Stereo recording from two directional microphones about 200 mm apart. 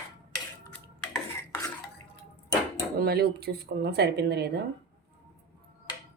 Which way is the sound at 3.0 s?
50° right (ahead or behind).